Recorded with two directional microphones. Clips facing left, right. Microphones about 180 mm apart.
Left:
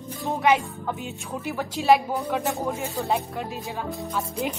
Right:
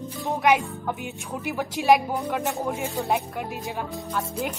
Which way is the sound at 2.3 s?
Centre (ahead or behind).